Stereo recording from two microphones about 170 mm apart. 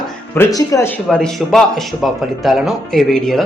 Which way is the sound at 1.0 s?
5° left (ahead or behind).